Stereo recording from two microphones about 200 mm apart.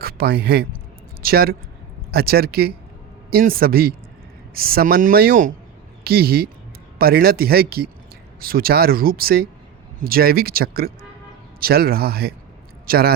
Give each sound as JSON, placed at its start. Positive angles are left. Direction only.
{"t": 0.0, "sound": "speech", "side_deg": -50}